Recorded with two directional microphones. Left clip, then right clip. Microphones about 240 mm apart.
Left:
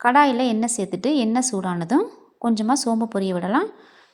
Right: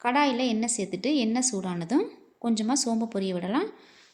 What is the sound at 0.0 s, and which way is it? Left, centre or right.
A woman's voice, centre.